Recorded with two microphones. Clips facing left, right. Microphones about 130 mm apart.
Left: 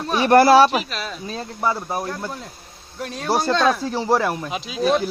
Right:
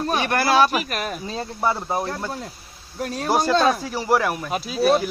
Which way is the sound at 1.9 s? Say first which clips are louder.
Right 1 dB; 25° right (ahead or behind).